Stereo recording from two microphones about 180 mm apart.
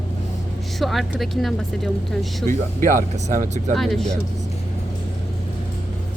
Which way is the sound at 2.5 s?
45° right (ahead or behind).